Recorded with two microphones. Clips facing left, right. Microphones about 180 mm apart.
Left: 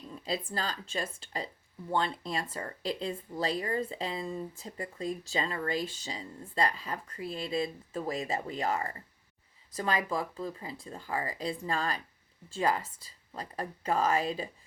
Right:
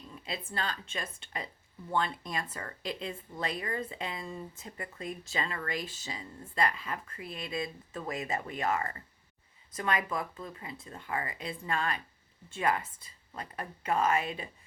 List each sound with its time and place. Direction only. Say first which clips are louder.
0.2 s speech: left 3 dB; 35° left (ahead or behind)